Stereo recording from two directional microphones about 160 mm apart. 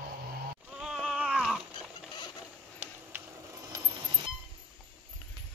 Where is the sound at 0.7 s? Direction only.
5° right (ahead or behind).